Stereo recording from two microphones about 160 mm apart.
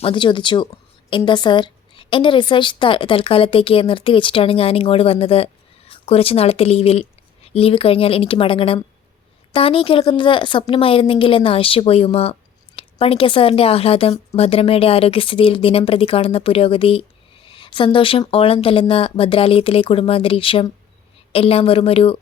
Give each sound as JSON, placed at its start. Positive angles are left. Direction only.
{"t": 0.0, "sound": "a woman's voice", "side_deg": 30}